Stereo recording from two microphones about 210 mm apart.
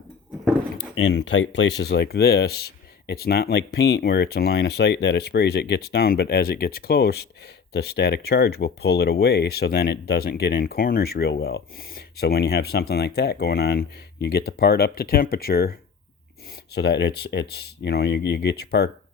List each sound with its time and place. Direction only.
0.9 s speech: 55° left (ahead or behind)
16.7 s speech: 55° left (ahead or behind)